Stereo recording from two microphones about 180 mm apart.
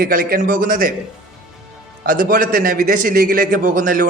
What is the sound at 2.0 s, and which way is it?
A man's voice, 50° right (ahead or behind).